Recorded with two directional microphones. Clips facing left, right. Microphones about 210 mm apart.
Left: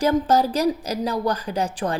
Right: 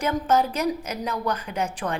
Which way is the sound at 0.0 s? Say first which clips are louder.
Left 4 dB; 35° left (ahead or behind).